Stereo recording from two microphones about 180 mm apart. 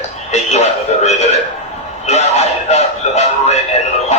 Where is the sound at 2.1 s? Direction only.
35° left (ahead or behind).